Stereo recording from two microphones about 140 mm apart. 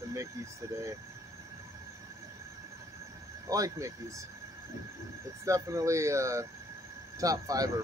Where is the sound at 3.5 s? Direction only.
25° right (ahead or behind).